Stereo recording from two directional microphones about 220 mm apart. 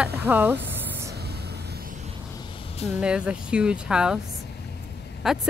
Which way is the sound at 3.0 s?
5° right (ahead or behind).